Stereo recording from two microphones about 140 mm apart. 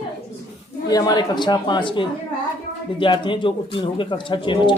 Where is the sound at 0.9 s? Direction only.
25° left (ahead or behind).